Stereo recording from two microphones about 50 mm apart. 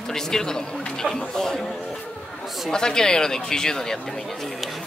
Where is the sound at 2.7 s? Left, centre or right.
Centre.